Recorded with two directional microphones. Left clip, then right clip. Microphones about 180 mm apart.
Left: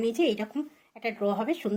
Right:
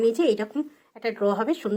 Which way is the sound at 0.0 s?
15° right (ahead or behind).